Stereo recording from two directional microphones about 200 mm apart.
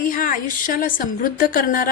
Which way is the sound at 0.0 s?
45° left (ahead or behind).